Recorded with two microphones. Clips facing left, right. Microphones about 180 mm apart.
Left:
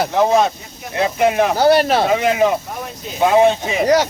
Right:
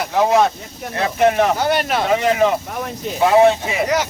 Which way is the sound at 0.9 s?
15° left (ahead or behind).